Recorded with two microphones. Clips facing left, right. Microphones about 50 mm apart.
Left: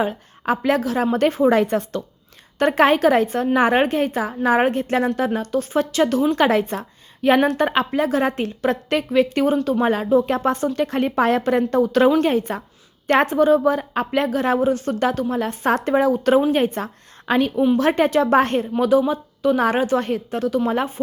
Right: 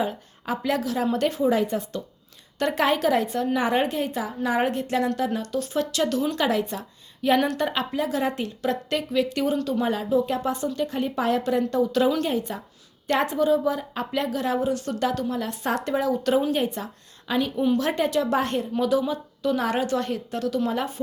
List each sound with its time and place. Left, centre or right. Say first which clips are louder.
0.0 s a woman's voice: left 5 dB; left
1.5 s a woman's voice: left 5 dB; left
2.6 s a woman's voice: left 7 dB; left
6.4 s a woman's voice: left 6 dB; left